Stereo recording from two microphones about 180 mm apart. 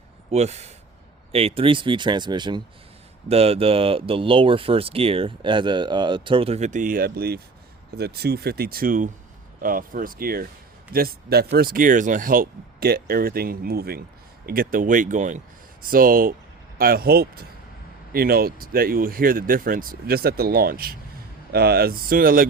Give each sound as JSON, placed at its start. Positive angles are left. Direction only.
{"t": 0.3, "sound": "speech", "side_deg": -35}